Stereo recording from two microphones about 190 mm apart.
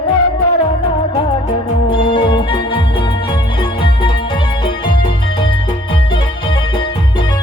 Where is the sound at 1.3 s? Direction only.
25° left (ahead or behind).